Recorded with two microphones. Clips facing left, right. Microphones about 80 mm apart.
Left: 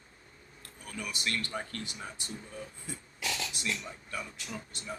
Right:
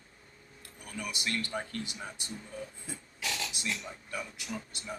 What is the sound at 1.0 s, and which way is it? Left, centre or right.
Speech, centre.